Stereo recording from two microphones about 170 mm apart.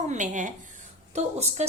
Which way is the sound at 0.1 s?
45° right (ahead or behind).